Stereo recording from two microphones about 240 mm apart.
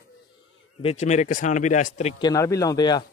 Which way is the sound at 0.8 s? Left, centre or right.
Left.